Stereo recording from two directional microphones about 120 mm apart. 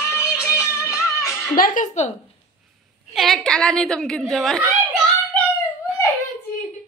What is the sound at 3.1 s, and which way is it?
A woman's voice, centre (ahead or behind).